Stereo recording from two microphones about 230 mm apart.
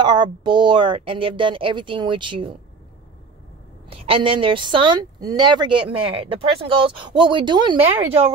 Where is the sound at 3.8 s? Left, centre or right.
Right.